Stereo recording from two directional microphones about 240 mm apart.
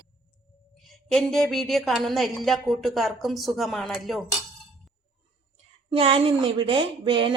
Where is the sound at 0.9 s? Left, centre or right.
Centre.